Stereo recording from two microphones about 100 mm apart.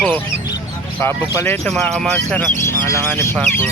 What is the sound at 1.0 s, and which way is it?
Speech, 25° left (ahead or behind).